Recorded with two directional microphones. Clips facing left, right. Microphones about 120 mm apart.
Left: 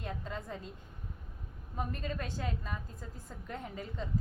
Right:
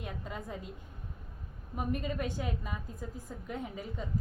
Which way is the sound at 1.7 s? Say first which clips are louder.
Right 4 dB; 15° right (ahead or behind).